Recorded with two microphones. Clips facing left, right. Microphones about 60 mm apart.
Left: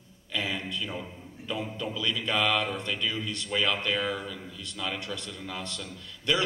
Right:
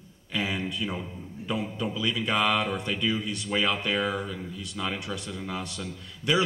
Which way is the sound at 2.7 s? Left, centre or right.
Centre.